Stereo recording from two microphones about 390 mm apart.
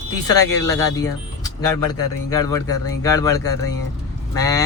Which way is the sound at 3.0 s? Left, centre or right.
Centre.